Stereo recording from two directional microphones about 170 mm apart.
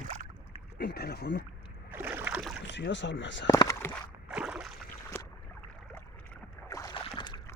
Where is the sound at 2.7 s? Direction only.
90° left.